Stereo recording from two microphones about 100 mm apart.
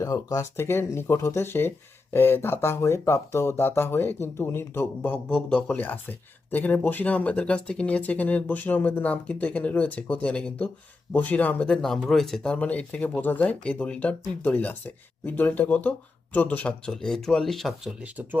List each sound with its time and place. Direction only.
0.0 s speech: 35° left (ahead or behind)
5.1 s speech: 10° left (ahead or behind)
18.0 s speech: 20° right (ahead or behind)